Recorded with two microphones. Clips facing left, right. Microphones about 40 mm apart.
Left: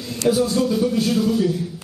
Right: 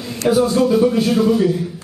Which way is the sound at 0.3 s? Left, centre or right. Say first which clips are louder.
Right 5 dB; centre.